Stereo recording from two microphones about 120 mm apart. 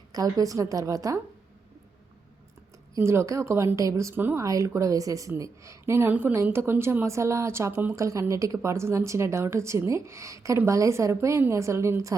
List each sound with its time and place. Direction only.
0.1 s a woman's voice: 30° right (ahead or behind)
2.9 s a woman's voice: 20° right (ahead or behind)